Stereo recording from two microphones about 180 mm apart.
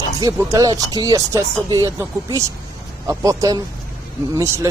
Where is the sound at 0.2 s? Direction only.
15° right (ahead or behind).